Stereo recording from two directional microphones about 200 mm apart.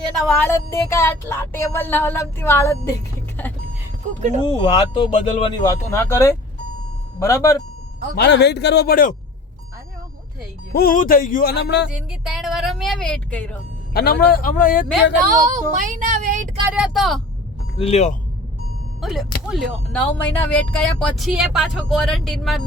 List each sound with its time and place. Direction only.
0.2 s speech: 5° left (ahead or behind)
4.4 s speech: 25° left (ahead or behind)
8.1 s a man's voice: 55° left (ahead or behind)
10.8 s speech: 45° left (ahead or behind)
11.9 s a woman's voice: 5° right (ahead or behind)
13.9 s speech: 50° left (ahead or behind)
15.4 s child singing: 40° right (ahead or behind)
16.6 s speech: 5° right (ahead or behind)
17.7 s speech: 30° left (ahead or behind)
19.0 s speech: centre (ahead or behind)